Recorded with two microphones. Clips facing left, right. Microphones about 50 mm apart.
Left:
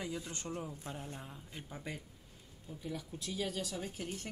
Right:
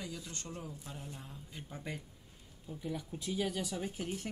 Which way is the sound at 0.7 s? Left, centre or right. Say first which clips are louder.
Left 2 dB; left.